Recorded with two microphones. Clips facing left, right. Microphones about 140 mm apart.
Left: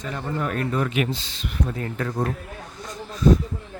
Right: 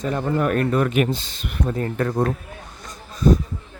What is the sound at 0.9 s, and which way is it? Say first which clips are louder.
Speech: right 4 dB; 50° right (ahead or behind).